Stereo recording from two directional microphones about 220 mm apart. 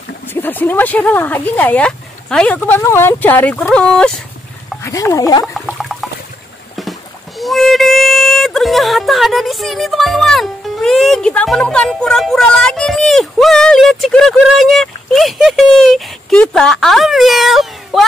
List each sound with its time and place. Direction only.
0.3 s speech: 10° left (ahead or behind)
5.4 s a sound: centre (ahead or behind)
6.8 s speech: centre (ahead or behind)